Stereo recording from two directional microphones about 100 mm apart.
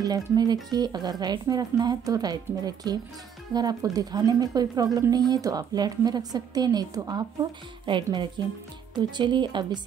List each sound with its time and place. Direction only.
0.0 s speech: 40° right (ahead or behind)
7.8 s a woman's voice: 55° right (ahead or behind)